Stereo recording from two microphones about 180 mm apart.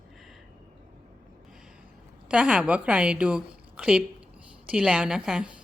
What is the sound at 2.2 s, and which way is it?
A woman's voice, 5° right (ahead or behind).